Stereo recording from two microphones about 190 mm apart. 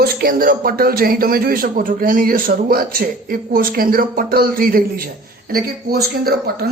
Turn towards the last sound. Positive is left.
turn(degrees=-55)  # may be behind; listen again after turning